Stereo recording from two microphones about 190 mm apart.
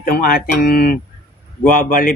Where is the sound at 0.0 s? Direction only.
50° left (ahead or behind).